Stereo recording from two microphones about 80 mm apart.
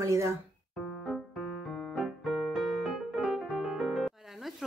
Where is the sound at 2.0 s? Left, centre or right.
Centre.